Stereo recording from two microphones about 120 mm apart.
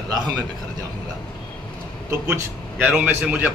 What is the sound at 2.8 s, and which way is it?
Speech, 10° right (ahead or behind).